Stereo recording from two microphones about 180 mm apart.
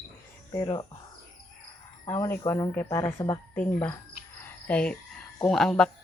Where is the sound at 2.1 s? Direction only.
15° left (ahead or behind).